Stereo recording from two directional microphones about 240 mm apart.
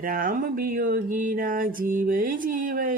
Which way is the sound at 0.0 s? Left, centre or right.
Right.